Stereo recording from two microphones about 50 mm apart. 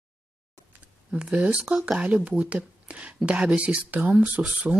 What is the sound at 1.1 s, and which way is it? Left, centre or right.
Speech, right.